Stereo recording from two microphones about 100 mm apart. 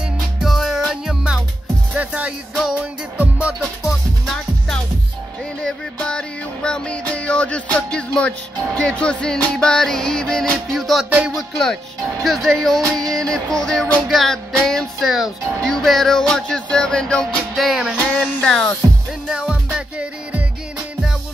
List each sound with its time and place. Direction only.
0.0 s music: centre (ahead or behind)
5.6 s music: 10° left (ahead or behind)
11.1 s music: 15° right (ahead or behind)
11.3 s music: 5° left (ahead or behind)
18.4 s music: 5° left (ahead or behind)
19.2 s music: 5° right (ahead or behind)